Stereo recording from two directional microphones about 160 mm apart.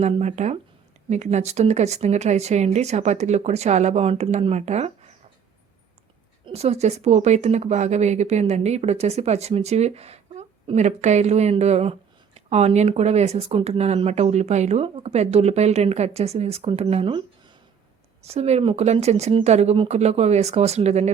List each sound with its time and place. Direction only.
0.0 s speech: 45° right (ahead or behind)
6.4 s speech: 40° right (ahead or behind)